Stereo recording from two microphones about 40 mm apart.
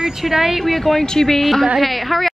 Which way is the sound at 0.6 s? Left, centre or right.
Centre.